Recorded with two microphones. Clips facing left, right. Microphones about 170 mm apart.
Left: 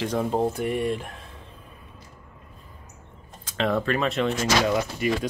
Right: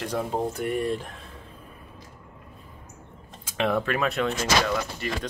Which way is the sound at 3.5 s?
10° right (ahead or behind).